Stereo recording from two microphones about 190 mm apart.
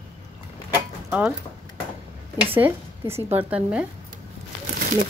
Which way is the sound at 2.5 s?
10° right (ahead or behind).